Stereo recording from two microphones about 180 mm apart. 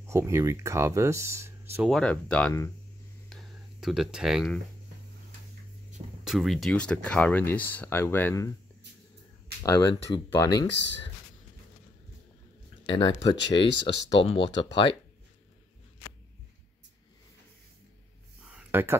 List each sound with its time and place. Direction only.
0.0 s speech: 15° right (ahead or behind)
1.8 s speech: centre (ahead or behind)
3.3 s a sound: centre (ahead or behind)
6.2 s speech: centre (ahead or behind)
9.6 s speech: 20° left (ahead or behind)
12.8 s speech: 25° left (ahead or behind)
18.7 s speech: 15° right (ahead or behind)